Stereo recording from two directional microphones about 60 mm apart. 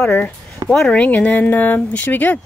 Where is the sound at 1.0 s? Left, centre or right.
Left.